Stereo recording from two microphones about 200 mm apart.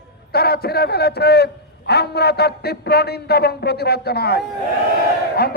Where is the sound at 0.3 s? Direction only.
50° left (ahead or behind).